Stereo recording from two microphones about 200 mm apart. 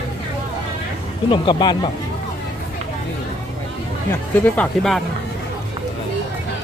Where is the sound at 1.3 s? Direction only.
25° left (ahead or behind).